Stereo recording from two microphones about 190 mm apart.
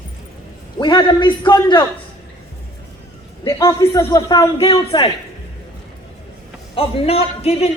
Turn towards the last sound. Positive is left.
turn(degrees=35)  # may be behind; listen again after turning